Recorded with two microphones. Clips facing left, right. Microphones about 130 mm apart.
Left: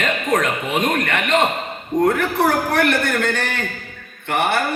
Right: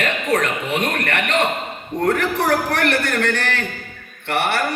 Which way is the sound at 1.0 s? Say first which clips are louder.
Left 2 dB; 65° right (ahead or behind).